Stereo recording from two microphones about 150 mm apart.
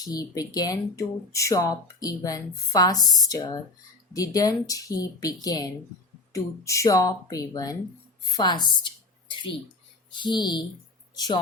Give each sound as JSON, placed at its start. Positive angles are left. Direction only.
{"t": 0.0, "sound": "a woman's voice", "side_deg": 25}
{"t": 9.3, "sound": "a sound", "side_deg": 35}
{"t": 10.1, "sound": "speech", "side_deg": 30}